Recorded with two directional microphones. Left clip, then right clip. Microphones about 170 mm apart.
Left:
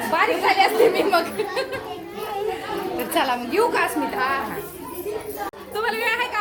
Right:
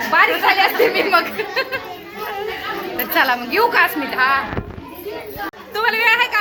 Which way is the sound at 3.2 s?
Centre (ahead or behind).